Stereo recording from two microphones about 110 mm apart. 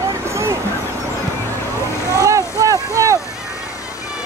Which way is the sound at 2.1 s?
30° right (ahead or behind).